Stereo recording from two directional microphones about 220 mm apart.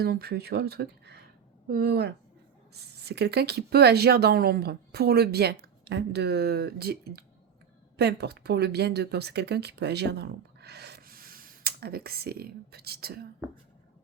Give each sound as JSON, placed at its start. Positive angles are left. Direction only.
{"t": 0.0, "sound": "speech", "side_deg": -45}